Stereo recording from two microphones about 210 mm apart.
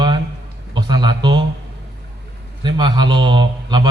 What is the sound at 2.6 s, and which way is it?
A man's voice, 20° right (ahead or behind).